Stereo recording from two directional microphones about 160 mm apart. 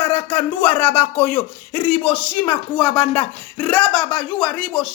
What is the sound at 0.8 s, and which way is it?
Speech, 10° left (ahead or behind).